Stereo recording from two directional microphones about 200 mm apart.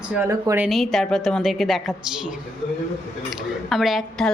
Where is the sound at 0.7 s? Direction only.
Centre (ahead or behind).